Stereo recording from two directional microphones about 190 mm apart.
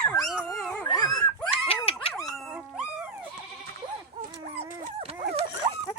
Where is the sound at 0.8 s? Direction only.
20° left (ahead or behind).